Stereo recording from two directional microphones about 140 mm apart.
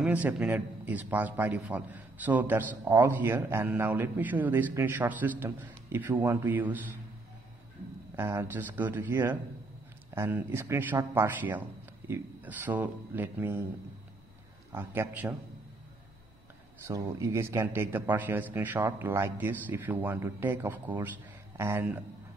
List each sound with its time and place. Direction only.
0.0 s speech: 10° right (ahead or behind)
8.2 s speech: 20° right (ahead or behind)
14.7 s speech: 15° right (ahead or behind)
16.8 s speech: 20° right (ahead or behind)